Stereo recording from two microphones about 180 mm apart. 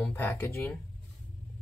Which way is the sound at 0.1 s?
10° left (ahead or behind).